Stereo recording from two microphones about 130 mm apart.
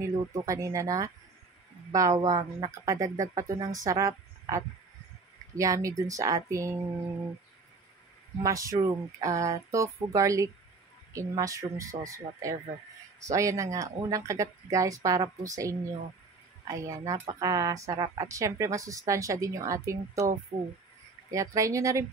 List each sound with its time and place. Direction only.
0.3 s speech: 25° right (ahead or behind)
8.4 s speech: 25° right (ahead or behind)